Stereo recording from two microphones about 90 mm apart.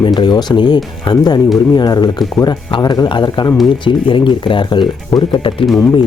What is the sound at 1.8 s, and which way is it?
Speech, 50° left (ahead or behind).